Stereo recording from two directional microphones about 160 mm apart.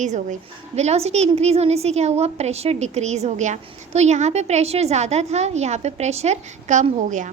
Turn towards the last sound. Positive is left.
turn(degrees=-50)  # may be behind; listen again after turning